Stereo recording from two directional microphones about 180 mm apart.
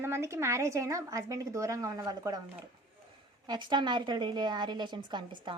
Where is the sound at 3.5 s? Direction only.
25° right (ahead or behind).